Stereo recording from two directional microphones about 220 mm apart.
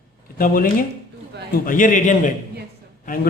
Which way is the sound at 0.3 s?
40° left (ahead or behind).